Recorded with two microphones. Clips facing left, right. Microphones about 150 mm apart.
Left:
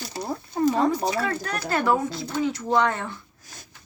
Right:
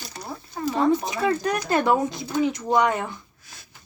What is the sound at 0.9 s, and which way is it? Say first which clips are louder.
Speech: right 3 dB; 20° right (ahead or behind).